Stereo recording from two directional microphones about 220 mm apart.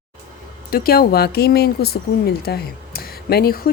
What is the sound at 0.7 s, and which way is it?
Speech, 45° left (ahead or behind).